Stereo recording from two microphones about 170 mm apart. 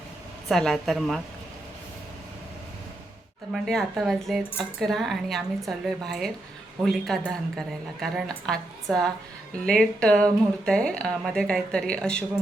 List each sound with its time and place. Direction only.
0.4 s speech: 5° left (ahead or behind)
3.5 s speech: centre (ahead or behind)